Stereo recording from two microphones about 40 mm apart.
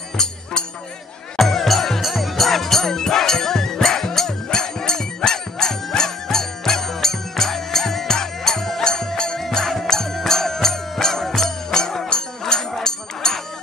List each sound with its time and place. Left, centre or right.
0.2 s music: centre
1.4 s music: centre